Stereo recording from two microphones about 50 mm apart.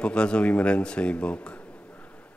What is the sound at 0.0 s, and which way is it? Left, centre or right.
Speech, left.